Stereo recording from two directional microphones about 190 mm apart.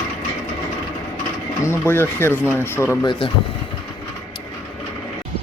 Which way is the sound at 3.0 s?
25° left (ahead or behind).